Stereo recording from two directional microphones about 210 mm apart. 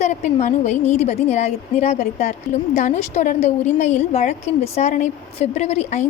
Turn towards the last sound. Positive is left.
turn(degrees=30)  # may be behind; listen again after turning